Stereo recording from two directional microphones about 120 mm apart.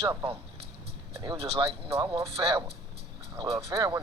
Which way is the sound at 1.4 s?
50° right (ahead or behind).